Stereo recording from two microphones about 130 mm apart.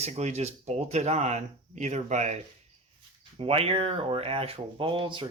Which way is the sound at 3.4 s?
45° right (ahead or behind).